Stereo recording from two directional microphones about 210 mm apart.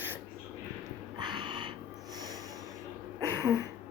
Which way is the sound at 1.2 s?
20° right (ahead or behind).